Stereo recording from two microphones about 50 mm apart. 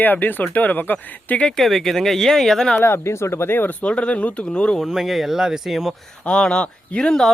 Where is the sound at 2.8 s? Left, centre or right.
Left.